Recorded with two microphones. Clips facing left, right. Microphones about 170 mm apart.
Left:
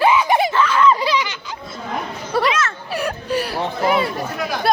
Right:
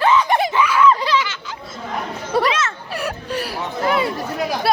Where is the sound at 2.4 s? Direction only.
30° right (ahead or behind).